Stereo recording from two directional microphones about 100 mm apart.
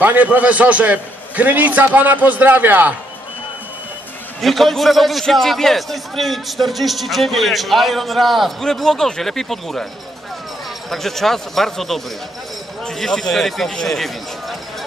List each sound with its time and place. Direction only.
0.0 s a man's voice: 15° right (ahead or behind)
4.4 s a man's voice: centre (ahead or behind)
10.9 s a man's voice: 5° left (ahead or behind)